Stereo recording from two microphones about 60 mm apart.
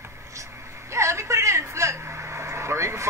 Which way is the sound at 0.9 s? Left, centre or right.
Right.